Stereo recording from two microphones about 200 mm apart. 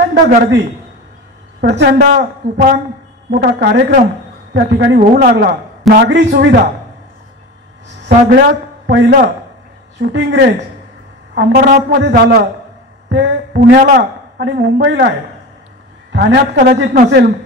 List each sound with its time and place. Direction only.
0.0 s a man's voice: 55° right (ahead or behind)
8.3 s a man's voice: 50° right (ahead or behind)
13.1 s a sound: 55° right (ahead or behind)
13.9 s a woman's voice: 60° right (ahead or behind)